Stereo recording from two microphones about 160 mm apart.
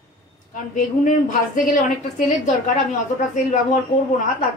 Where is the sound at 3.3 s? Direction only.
50° left (ahead or behind).